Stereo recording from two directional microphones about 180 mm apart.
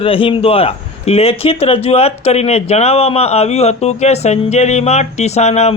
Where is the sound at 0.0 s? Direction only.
30° left (ahead or behind).